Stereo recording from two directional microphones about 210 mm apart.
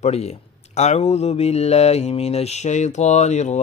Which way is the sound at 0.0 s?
30° left (ahead or behind).